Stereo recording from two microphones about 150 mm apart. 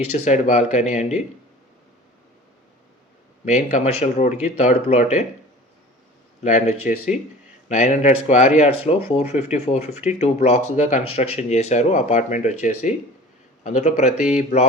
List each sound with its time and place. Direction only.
0.1 s speech: 50° left (ahead or behind)
3.4 s speech: 50° left (ahead or behind)
6.4 s speech: 55° left (ahead or behind)